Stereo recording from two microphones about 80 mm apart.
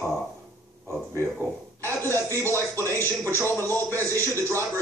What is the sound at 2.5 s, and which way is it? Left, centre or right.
Speech, right.